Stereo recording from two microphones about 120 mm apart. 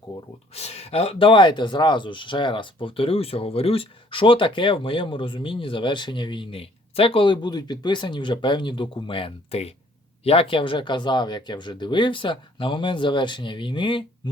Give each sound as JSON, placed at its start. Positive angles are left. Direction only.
{"t": 0.5, "sound": "speech", "side_deg": 60}